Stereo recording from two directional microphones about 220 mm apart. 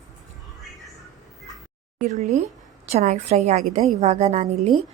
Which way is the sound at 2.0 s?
30° right (ahead or behind).